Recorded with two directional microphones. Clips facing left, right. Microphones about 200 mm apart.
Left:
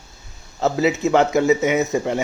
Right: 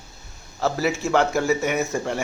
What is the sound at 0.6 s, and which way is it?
A man's voice, 20° left (ahead or behind).